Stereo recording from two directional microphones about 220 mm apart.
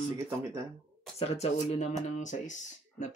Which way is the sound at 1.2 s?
30° left (ahead or behind).